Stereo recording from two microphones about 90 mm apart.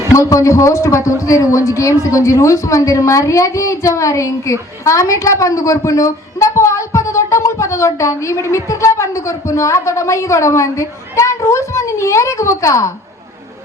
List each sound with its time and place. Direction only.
0.1 s a woman's voice: 35° left (ahead or behind)